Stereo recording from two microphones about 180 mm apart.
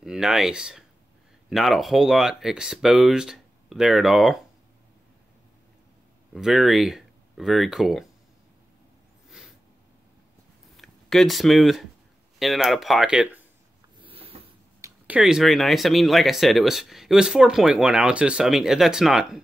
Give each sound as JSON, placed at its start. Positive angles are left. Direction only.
{"t": 0.0, "sound": "speech", "side_deg": -5}
{"t": 6.3, "sound": "speech", "side_deg": 0}
{"t": 10.8, "sound": "speech", "side_deg": 0}
{"t": 14.0, "sound": "a sound", "side_deg": -30}
{"t": 14.8, "sound": "speech", "side_deg": -5}